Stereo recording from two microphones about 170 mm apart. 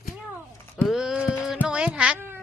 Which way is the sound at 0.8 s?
Centre (ahead or behind).